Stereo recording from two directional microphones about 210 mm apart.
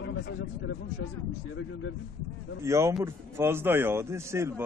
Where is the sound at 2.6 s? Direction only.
15° right (ahead or behind).